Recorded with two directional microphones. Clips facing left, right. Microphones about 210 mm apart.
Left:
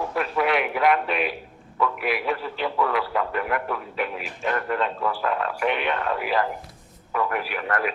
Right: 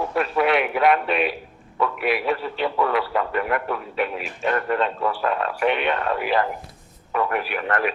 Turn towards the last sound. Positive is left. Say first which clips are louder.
# right 2 dB
turn(degrees=-30)  # may be behind; listen again after turning